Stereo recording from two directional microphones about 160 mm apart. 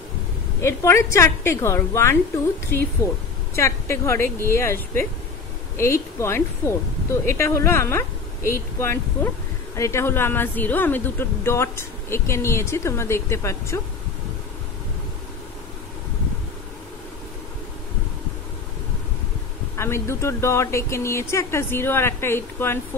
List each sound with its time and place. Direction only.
0.6 s a woman's voice: 15° left (ahead or behind)
19.8 s a woman's voice: 15° left (ahead or behind)